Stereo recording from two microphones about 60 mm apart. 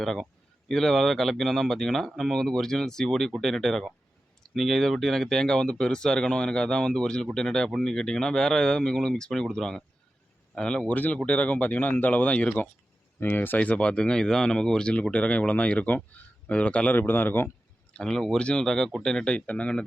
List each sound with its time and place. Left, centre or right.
0.0 s speech: centre; by 12.5 s left
13.1 s speech: left
13.6 s speech: left
17.9 s speech: centre